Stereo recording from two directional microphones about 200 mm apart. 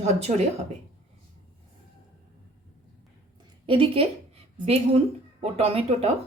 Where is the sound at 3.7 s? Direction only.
25° right (ahead or behind).